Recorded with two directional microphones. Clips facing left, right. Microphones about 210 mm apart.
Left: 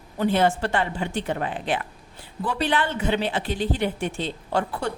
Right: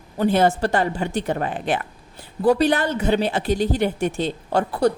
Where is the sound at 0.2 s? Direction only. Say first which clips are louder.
Right 3 dB; 40° right (ahead or behind).